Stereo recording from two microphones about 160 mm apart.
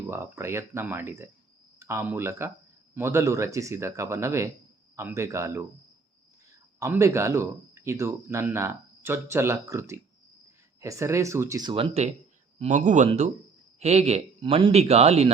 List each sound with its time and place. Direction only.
0.1 s speech: 15° right (ahead or behind)
6.7 s speech: 20° right (ahead or behind)
11.7 s speech: 40° right (ahead or behind)
12.5 s speech: 50° right (ahead or behind)